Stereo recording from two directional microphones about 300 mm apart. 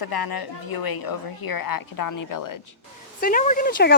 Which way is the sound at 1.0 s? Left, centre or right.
Left.